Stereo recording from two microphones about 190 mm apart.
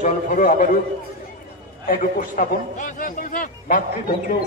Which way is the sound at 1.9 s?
45° left (ahead or behind).